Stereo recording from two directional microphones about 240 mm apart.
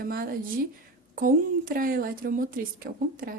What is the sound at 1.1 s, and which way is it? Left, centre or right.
A woman's voice, right.